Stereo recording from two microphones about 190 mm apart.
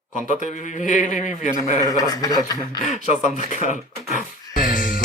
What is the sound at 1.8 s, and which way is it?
Speech, 20° left (ahead or behind).